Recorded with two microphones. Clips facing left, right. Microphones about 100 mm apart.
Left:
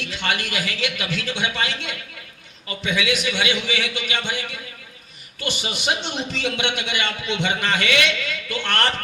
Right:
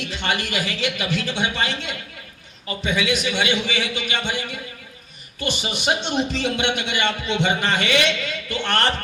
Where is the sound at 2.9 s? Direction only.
35° right (ahead or behind).